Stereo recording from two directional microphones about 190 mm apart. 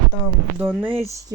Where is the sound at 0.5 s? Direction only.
10° right (ahead or behind).